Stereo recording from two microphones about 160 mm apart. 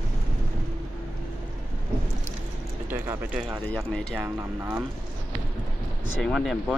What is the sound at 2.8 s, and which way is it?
Speech, 10° right (ahead or behind).